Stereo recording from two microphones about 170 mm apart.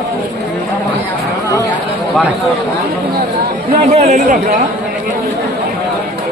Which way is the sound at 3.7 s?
40° right (ahead or behind).